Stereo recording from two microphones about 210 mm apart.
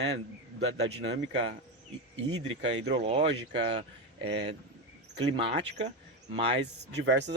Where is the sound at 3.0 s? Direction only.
30° right (ahead or behind).